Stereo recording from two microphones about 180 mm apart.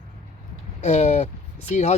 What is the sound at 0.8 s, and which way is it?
Speech, 40° left (ahead or behind).